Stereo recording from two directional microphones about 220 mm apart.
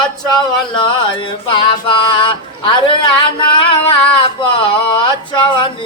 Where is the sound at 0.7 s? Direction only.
20° left (ahead or behind).